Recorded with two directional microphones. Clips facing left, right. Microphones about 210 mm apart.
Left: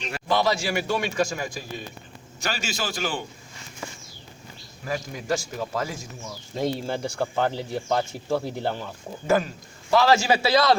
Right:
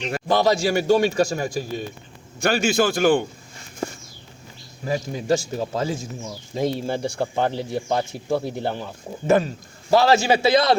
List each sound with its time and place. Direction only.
0.1 s a man's voice: 40° right (ahead or behind)
2.4 s a man's voice: 55° right (ahead or behind)
4.9 s a man's voice: 25° right (ahead or behind)
6.5 s a man's voice: 15° right (ahead or behind)